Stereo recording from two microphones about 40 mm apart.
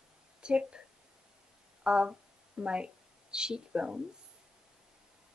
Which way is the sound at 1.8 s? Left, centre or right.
Right.